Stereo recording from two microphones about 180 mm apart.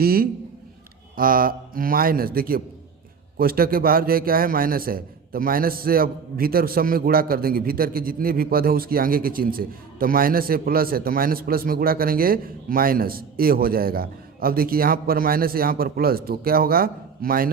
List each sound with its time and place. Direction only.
0.0 s a man's voice: 55° right (ahead or behind)